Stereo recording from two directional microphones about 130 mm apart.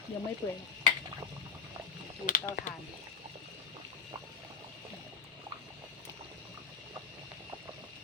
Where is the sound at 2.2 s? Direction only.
90° left.